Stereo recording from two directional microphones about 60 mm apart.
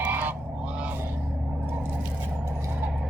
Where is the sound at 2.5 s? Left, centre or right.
Right.